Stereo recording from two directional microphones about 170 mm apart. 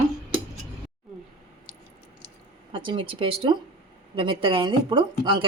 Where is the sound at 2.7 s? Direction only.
30° right (ahead or behind).